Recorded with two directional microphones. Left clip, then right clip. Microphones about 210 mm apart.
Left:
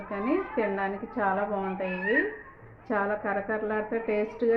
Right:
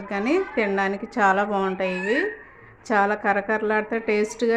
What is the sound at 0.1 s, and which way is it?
A woman's voice, 40° right (ahead or behind).